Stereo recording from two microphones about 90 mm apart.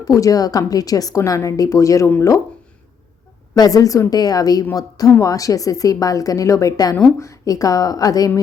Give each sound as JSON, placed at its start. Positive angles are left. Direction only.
{"t": 0.0, "sound": "a woman's voice", "side_deg": 40}
{"t": 3.5, "sound": "a woman's voice", "side_deg": 45}